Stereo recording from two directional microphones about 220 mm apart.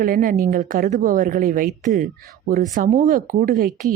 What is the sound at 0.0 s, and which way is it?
A woman's voice, 40° right (ahead or behind).